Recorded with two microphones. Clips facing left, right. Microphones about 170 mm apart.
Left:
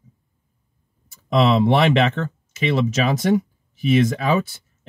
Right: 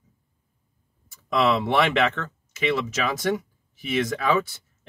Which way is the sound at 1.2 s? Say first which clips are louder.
Left 5 dB; 25° left (ahead or behind).